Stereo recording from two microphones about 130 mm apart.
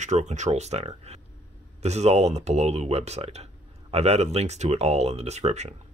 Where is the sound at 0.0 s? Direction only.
65° right (ahead or behind).